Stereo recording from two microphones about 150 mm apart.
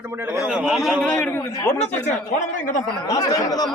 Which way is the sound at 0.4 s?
5° right (ahead or behind).